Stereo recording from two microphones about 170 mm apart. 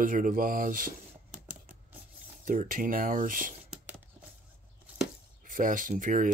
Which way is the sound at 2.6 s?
55° right (ahead or behind).